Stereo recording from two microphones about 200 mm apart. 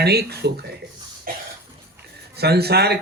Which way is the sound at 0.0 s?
55° right (ahead or behind).